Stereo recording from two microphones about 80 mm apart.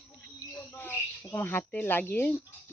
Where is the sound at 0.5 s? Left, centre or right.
Left.